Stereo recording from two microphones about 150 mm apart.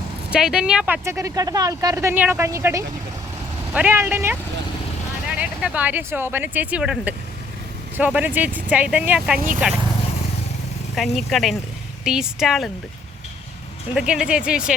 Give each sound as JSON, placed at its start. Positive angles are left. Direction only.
{"t": 0.3, "sound": "speech", "side_deg": -5}
{"t": 1.0, "sound": "speech", "side_deg": -20}
{"t": 5.4, "sound": "speech", "side_deg": -10}
{"t": 10.9, "sound": "speech", "side_deg": 0}
{"t": 14.1, "sound": "speech", "side_deg": -5}